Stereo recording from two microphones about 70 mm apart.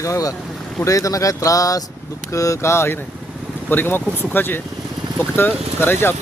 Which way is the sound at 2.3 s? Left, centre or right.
Left.